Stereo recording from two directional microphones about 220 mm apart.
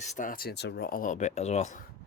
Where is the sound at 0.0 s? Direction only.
35° left (ahead or behind).